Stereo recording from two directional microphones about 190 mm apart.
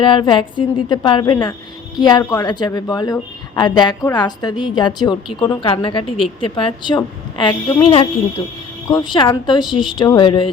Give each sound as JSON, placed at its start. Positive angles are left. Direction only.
{"t": 0.0, "sound": "a woman's voice", "side_deg": 25}